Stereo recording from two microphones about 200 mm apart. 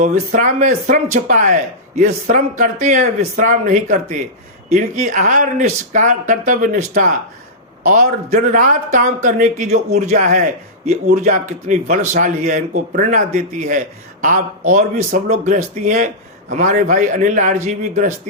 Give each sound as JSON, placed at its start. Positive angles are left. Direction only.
{"t": 0.0, "sound": "a man's voice", "side_deg": -40}